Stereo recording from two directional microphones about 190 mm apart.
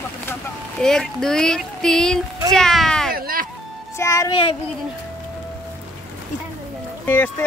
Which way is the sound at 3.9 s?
15° left (ahead or behind).